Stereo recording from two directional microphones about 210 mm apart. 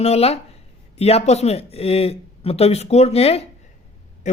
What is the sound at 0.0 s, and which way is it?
Speech, 30° left (ahead or behind).